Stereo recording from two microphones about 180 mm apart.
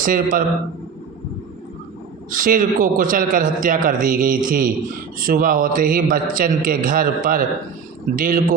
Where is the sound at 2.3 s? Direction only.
50° right (ahead or behind).